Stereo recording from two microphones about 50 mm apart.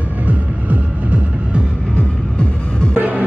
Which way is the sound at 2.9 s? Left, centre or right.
Right.